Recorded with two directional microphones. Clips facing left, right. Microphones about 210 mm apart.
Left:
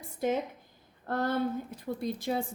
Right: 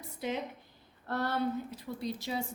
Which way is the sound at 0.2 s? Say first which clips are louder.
Left 6 dB; 50° left (ahead or behind).